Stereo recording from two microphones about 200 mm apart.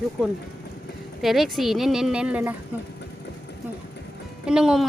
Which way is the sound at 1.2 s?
Centre (ahead or behind).